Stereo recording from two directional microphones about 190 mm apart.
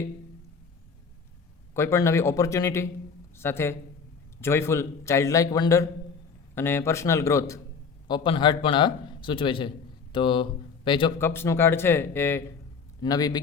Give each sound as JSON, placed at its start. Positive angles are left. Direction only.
{"t": 1.7, "sound": "a man's voice", "side_deg": 15}
{"t": 11.2, "sound": "a man's voice", "side_deg": 10}